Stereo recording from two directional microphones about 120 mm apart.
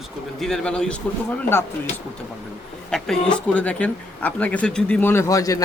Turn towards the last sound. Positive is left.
turn(degrees=30)  # may be behind; listen again after turning